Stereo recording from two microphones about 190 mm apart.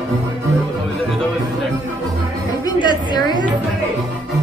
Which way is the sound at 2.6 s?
25° left (ahead or behind).